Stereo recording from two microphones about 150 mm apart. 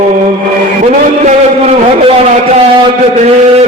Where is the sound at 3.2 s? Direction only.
45° right (ahead or behind).